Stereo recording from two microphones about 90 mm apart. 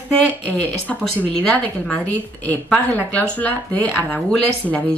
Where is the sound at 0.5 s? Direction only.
15° left (ahead or behind).